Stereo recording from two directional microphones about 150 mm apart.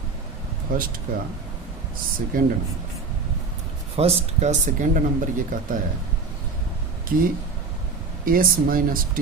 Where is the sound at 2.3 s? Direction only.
70° right (ahead or behind).